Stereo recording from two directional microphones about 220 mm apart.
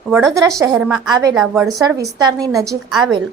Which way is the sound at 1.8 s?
15° right (ahead or behind).